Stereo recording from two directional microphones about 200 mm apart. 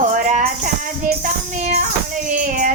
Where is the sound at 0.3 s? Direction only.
40° right (ahead or behind).